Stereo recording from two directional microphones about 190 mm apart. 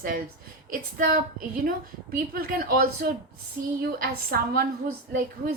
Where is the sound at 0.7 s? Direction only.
50° right (ahead or behind).